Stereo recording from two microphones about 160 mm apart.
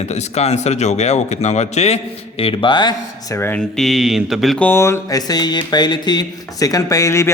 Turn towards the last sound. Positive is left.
turn(degrees=20)  # may be behind; listen again after turning